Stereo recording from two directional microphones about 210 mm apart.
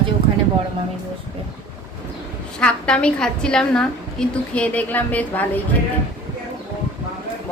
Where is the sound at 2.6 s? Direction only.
5° left (ahead or behind).